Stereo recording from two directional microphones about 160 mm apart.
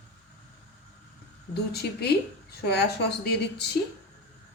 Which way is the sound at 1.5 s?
90° left.